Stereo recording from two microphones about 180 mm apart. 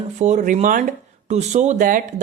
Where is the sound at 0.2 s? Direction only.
40° right (ahead or behind).